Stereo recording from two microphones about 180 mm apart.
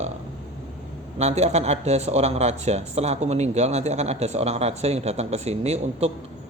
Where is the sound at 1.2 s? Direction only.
40° right (ahead or behind).